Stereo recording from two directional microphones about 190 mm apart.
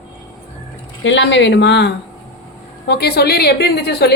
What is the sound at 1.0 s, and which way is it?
A woman's voice, 70° left (ahead or behind).